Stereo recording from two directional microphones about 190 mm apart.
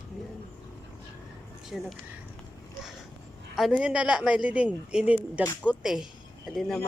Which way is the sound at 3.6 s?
Centre (ahead or behind).